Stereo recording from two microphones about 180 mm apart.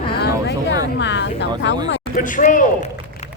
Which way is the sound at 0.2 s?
70° left (ahead or behind).